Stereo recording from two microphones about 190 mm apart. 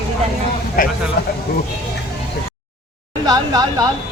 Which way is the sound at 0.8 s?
45° left (ahead or behind).